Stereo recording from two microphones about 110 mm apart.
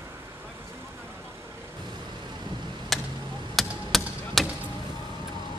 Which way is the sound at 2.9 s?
Centre (ahead or behind).